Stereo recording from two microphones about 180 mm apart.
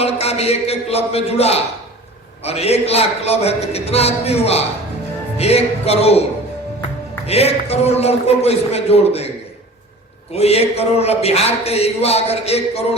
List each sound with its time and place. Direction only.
0.0 s speech: 35° left (ahead or behind)
7.3 s speech: 35° left (ahead or behind)
10.3 s speech: 35° left (ahead or behind)